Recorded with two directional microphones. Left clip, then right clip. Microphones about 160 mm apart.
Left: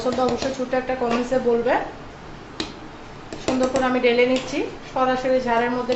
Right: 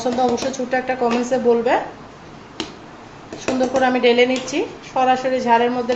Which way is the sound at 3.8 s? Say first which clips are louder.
Right 5 dB; 75° right (ahead or behind).